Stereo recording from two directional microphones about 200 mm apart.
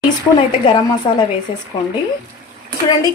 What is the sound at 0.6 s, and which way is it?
Speech, 20° left (ahead or behind).